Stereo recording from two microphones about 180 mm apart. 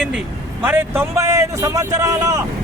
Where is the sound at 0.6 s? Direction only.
10° right (ahead or behind).